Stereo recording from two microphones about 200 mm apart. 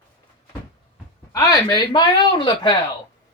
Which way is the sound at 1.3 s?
20° left (ahead or behind).